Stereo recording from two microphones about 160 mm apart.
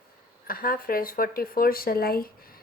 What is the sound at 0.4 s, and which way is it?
Speech, 65° left (ahead or behind).